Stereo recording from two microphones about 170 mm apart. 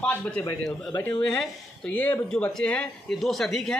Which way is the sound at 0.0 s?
5° left (ahead or behind).